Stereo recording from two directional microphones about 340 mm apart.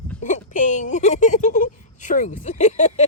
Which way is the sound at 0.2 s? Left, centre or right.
Left.